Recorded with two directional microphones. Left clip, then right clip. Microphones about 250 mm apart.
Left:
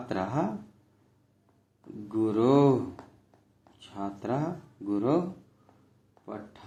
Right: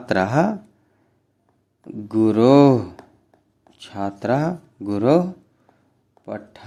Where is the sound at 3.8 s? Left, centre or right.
Right.